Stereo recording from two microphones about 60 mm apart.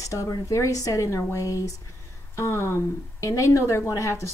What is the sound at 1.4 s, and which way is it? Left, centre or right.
Speech, left.